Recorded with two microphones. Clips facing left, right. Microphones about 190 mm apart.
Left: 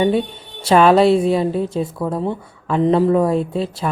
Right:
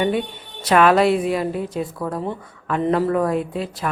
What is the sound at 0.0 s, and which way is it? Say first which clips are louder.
Speech: left 4 dB; 30° left (ahead or behind).